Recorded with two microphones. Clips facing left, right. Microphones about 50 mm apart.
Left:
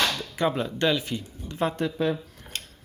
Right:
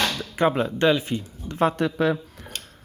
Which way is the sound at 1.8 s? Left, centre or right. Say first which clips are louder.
Right 4 dB; right.